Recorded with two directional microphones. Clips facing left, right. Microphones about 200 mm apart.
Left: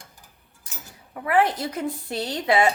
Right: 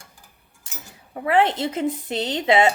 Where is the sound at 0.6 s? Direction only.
25° right (ahead or behind).